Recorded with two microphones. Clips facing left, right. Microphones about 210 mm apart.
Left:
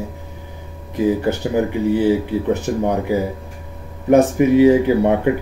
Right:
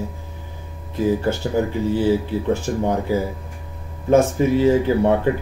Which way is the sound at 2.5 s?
20° left (ahead or behind).